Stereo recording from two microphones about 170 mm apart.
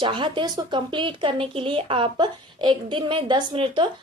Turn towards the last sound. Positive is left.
turn(degrees=-30)  # may be behind; listen again after turning